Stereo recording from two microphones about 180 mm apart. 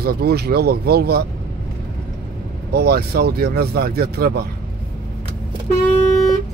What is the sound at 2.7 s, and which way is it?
Speech, 60° right (ahead or behind).